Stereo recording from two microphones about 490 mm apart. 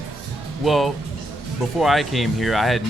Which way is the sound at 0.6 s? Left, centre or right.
Centre.